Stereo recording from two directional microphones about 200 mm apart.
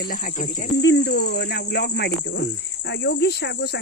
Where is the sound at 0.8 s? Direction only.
60° left (ahead or behind).